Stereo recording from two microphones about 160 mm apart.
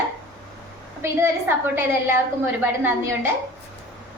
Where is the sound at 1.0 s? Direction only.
15° right (ahead or behind).